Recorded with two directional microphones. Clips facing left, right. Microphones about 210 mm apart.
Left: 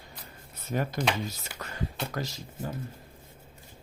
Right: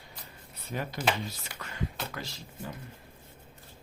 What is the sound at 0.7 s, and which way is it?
Speech, 45° left (ahead or behind).